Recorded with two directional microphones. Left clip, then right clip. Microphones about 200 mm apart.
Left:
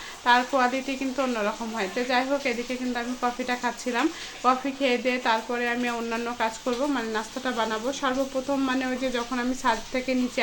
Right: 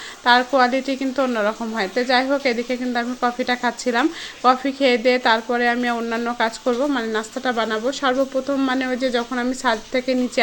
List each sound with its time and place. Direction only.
0.3 s speech: 35° right (ahead or behind)